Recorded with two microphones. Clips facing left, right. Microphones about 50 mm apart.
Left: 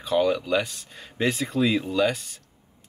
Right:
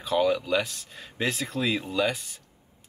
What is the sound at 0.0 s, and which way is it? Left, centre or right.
Speech, centre.